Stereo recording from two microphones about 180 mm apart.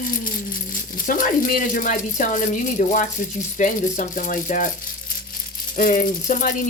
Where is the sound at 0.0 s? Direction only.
50° left (ahead or behind).